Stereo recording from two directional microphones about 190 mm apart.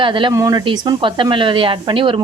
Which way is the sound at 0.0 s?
25° right (ahead or behind).